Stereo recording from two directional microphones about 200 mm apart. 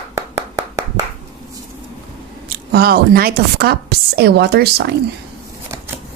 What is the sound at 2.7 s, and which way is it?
A woman's voice, 50° right (ahead or behind).